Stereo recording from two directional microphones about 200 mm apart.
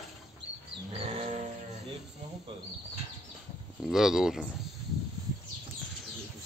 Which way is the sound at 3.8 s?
Centre (ahead or behind).